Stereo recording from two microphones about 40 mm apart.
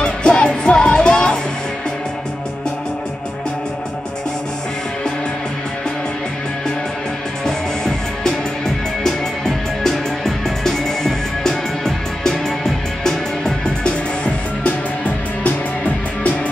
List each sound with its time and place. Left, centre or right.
0.0 s music: left
7.4 s music: centre
13.8 s music: left
15.0 s music: left